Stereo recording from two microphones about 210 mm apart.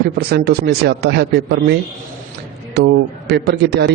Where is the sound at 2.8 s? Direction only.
50° right (ahead or behind).